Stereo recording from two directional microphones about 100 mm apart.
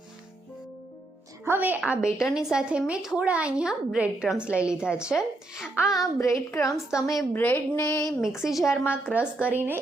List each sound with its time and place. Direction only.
1.5 s a woman's voice: 20° right (ahead or behind)
6.0 s a woman's voice: 35° left (ahead or behind)
7.0 s a woman's voice: centre (ahead or behind)
7.3 s speech: 20° left (ahead or behind)
7.8 s a woman's voice: 30° left (ahead or behind)
8.4 s a woman's voice: 5° right (ahead or behind)
8.6 s a woman's voice: 25° left (ahead or behind)
9.1 s a woman's voice: 15° right (ahead or behind)